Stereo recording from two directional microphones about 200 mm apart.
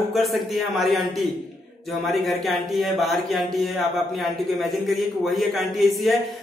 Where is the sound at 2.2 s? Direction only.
Centre (ahead or behind).